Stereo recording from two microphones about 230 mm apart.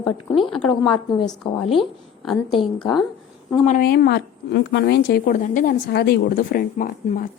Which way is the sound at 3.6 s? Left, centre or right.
Left.